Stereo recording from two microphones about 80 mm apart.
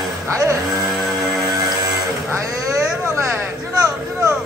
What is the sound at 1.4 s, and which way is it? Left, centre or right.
Music, right.